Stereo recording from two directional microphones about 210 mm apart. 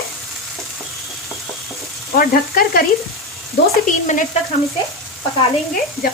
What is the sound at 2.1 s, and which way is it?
Speech, 45° left (ahead or behind).